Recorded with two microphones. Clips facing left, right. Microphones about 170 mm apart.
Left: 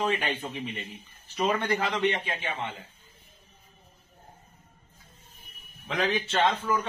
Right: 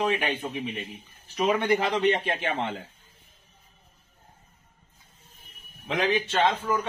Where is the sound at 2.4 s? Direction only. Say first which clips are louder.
Right 5 dB; 75° right (ahead or behind).